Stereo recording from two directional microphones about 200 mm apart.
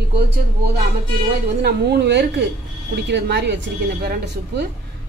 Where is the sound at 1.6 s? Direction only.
55° right (ahead or behind).